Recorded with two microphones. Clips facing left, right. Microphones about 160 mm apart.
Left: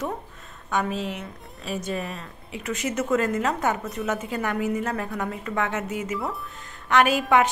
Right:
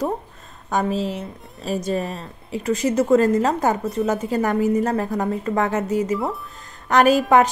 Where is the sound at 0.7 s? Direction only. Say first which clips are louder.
Right 5 dB; 35° right (ahead or behind).